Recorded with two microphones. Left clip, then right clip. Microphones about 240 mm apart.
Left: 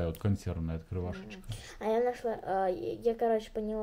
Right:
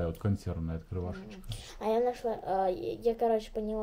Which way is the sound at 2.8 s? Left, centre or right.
Right.